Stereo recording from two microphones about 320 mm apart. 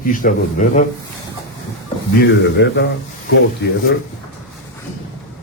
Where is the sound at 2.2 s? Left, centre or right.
Left.